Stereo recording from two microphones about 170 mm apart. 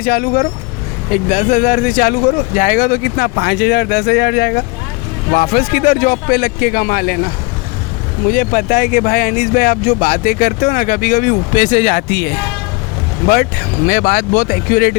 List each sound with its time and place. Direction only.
0.0 s speech: 65° left (ahead or behind)
1.1 s speech: 45° left (ahead or behind); by 4.6 s 65° left (ahead or behind)
5.3 s speech: 55° left (ahead or behind)
8.3 s speech: 60° left (ahead or behind)
12.0 s speech: 65° left (ahead or behind)